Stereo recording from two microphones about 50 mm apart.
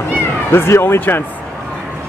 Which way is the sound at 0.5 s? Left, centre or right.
Left.